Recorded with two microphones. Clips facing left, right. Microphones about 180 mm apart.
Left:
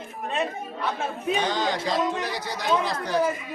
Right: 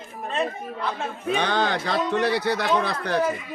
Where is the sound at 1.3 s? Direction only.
60° right (ahead or behind).